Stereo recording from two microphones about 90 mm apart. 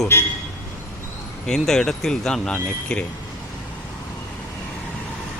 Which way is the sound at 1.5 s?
5° left (ahead or behind).